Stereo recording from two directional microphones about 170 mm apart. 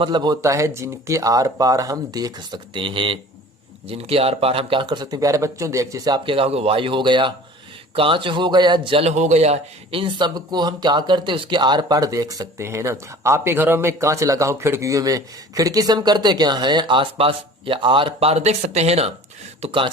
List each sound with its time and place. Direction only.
0.0 s a man's voice: 25° right (ahead or behind)